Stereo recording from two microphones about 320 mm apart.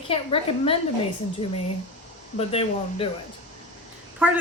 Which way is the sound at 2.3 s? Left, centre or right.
Centre.